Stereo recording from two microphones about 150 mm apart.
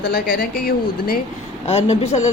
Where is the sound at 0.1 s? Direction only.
90° left.